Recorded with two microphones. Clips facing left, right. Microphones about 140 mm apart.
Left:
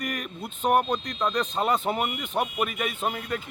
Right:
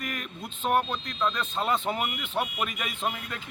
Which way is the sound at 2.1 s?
35° left (ahead or behind).